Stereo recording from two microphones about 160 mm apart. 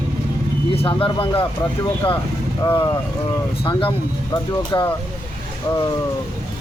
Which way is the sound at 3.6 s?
35° left (ahead or behind).